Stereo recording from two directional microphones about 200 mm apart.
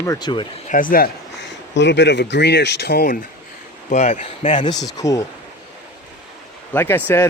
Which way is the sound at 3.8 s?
35° left (ahead or behind).